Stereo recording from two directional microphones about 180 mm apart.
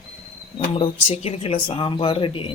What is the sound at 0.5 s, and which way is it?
Speech, 30° left (ahead or behind).